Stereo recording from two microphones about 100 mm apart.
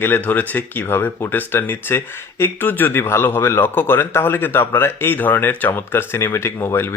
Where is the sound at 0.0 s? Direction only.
20° left (ahead or behind).